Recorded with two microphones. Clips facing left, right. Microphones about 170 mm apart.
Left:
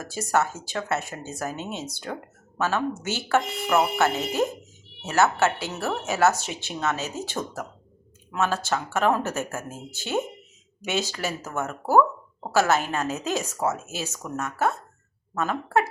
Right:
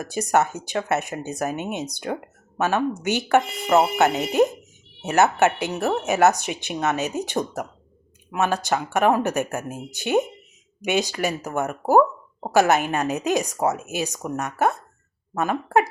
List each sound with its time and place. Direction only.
0.0 s speech: 15° right (ahead or behind)